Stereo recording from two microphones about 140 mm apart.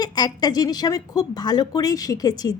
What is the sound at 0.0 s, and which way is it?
Speech, 30° left (ahead or behind).